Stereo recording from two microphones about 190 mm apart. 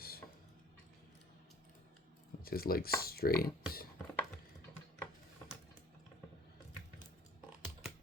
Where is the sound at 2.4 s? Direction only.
50° left (ahead or behind).